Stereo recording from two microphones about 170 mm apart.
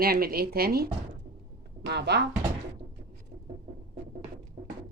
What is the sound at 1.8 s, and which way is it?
Speech, 80° right.